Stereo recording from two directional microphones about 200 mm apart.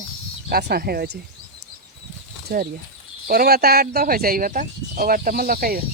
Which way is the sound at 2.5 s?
50° right (ahead or behind).